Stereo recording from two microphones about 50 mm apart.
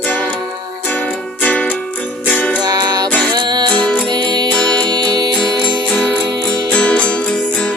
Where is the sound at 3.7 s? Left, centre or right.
Left.